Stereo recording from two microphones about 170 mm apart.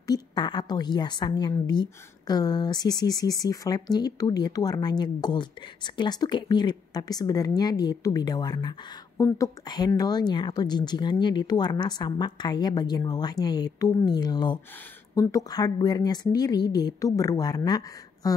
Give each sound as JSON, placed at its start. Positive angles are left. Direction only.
{"t": 0.0, "sound": "a woman's voice", "side_deg": 25}